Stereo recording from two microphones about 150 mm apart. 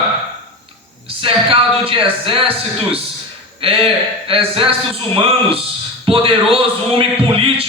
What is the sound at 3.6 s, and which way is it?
A man's voice, 40° right (ahead or behind).